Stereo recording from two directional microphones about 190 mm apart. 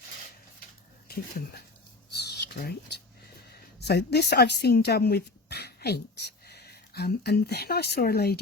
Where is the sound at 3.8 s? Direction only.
60° left (ahead or behind).